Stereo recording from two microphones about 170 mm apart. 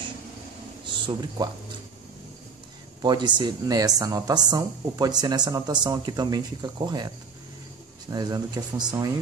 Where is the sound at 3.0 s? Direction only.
25° right (ahead or behind).